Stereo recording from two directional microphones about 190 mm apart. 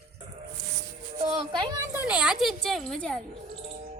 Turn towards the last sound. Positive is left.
turn(degrees=5)  # may be behind; listen again after turning